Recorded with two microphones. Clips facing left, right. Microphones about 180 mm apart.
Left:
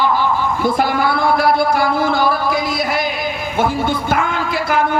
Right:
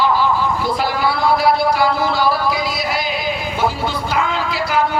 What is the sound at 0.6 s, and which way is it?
Speech, 50° left (ahead or behind).